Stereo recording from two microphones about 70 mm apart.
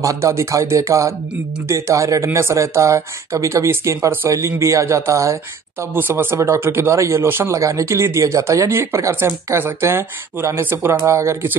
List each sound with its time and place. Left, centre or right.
0.0 s speech: right
5.9 s speech: right
6.3 s speech: right